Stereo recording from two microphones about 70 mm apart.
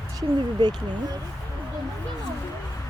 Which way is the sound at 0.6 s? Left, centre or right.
Right.